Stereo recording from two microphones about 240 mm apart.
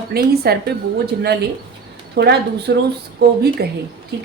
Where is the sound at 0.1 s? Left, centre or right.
Right.